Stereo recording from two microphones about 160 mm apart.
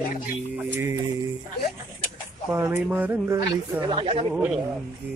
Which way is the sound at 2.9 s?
10° right (ahead or behind).